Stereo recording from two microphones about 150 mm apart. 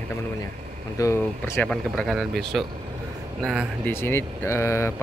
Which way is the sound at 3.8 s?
15° left (ahead or behind).